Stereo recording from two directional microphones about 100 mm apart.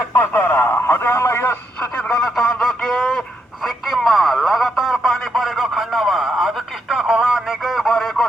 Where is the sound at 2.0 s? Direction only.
5° left (ahead or behind).